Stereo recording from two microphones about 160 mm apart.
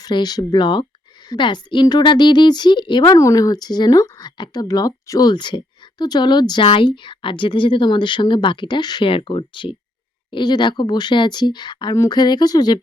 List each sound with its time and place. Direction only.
0.0 s a woman's voice: 25° left (ahead or behind)